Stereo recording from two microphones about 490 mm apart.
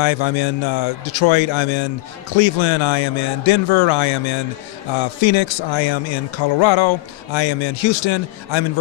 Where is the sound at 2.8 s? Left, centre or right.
Left.